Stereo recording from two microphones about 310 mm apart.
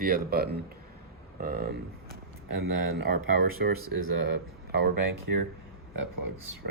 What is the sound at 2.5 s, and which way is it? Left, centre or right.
Speech, right.